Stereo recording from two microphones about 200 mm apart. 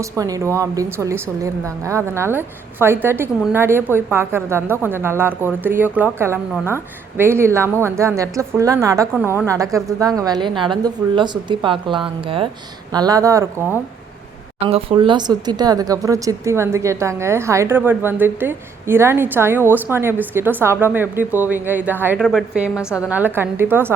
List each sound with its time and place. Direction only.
0.0 s a woman's voice: 15° right (ahead or behind)
14.6 s a woman's voice: 30° right (ahead or behind); by 23.9 s 10° right (ahead or behind)